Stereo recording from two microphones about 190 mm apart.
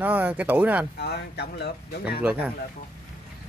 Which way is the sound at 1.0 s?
60° left (ahead or behind).